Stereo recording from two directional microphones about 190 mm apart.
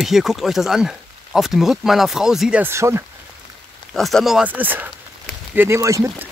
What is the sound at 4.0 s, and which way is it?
Speech, centre (ahead or behind).